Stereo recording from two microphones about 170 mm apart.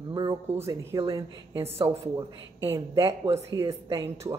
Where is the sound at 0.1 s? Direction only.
25° right (ahead or behind).